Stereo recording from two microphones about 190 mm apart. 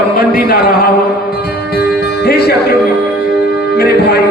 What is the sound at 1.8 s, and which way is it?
Music, 55° left (ahead or behind).